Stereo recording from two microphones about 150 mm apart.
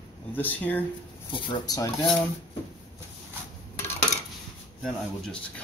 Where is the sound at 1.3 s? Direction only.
30° left (ahead or behind).